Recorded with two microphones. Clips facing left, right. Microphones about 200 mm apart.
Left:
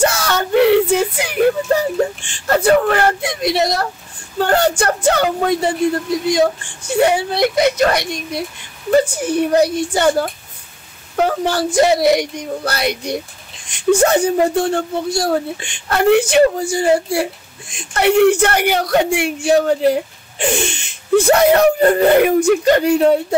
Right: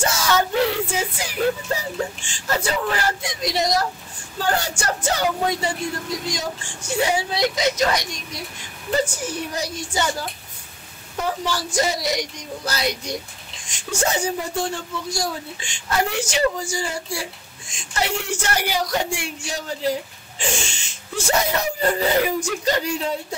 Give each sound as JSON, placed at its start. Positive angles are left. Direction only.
{"t": 0.0, "sound": "speech", "side_deg": 60}